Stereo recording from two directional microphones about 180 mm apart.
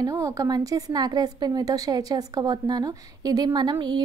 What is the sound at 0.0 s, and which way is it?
A woman's voice, 20° right (ahead or behind).